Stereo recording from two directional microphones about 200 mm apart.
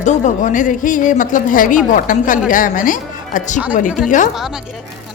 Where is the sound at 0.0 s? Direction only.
40° left (ahead or behind).